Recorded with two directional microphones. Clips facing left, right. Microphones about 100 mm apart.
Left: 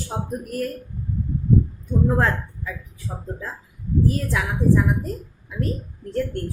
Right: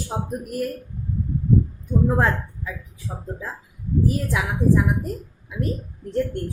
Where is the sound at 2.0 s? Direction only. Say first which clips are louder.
Even; 10° right (ahead or behind).